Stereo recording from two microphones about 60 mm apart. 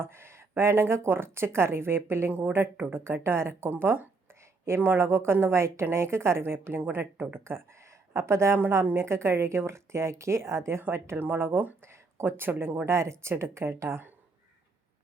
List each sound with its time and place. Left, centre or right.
0.0 s a woman's voice: right